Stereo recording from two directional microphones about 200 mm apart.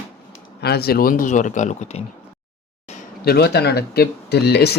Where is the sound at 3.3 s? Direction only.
50° left (ahead or behind).